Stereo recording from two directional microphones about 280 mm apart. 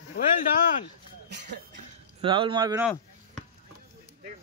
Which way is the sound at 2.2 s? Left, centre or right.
Centre.